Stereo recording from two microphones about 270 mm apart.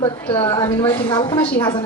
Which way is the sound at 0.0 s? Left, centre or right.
Centre.